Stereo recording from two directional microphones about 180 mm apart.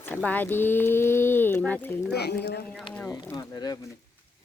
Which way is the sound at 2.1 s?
65° left (ahead or behind).